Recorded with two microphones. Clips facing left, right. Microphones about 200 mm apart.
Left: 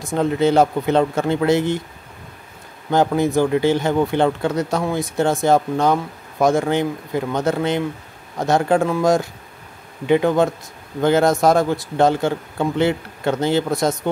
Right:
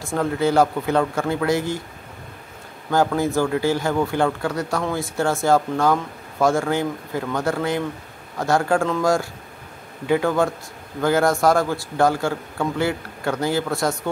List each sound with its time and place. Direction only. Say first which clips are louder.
0.0 s speech: left 3 dB; 20° left (ahead or behind)
2.9 s speech: left 3 dB; 20° left (ahead or behind)